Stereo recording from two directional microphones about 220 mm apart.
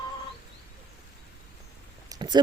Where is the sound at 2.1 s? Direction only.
20° right (ahead or behind).